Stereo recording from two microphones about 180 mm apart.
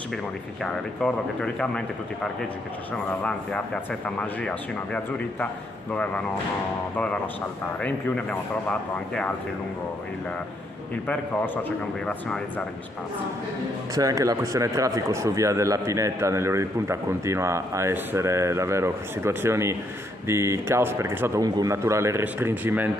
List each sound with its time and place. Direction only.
1.0 s speech: 5° left (ahead or behind)
3.2 s speech: 5° left (ahead or behind)
7.8 s speech: 5° left (ahead or behind)
11.1 s speech: 10° left (ahead or behind)
13.9 s a man's voice: 20° right (ahead or behind)